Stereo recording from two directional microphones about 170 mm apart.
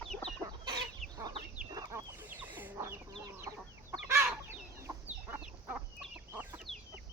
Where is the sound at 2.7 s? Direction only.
20° right (ahead or behind).